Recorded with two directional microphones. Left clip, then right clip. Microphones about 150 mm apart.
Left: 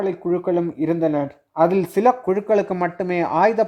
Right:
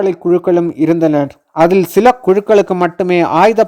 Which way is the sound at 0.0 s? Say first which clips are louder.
Right 9 dB; 40° right (ahead or behind).